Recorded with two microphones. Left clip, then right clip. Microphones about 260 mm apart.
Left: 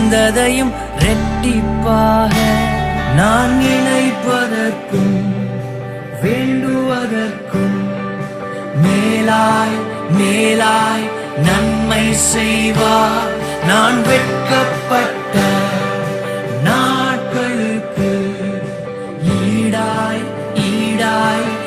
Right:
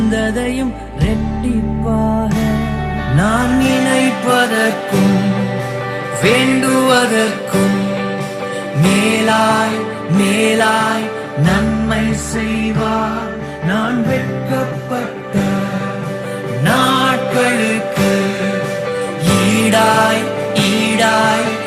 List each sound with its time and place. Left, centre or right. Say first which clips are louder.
0.0 s music: left 5 dB; left
2.3 s music: left 5 dB; left
3.2 s music: left 2 dB; centre
6.2 s music: right 4 dB; right
8.8 s music: right 1 dB; centre; by 13.2 s left
13.7 s music: left 6 dB; left
16.6 s music: right 2 dB; centre
19.2 s music: right 3 dB; right; by 21.5 s centre